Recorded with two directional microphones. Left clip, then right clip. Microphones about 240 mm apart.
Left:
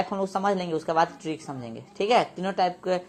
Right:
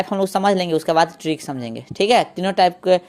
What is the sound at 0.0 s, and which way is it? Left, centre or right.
A woman's voice, right.